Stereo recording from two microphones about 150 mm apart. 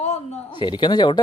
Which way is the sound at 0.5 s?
30° left (ahead or behind).